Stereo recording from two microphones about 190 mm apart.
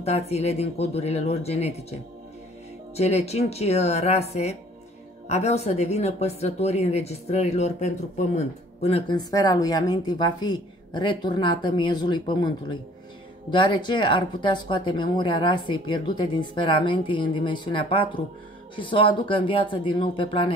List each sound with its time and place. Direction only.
0.0 s speech: 35° left (ahead or behind)
3.0 s speech: 35° left (ahead or behind)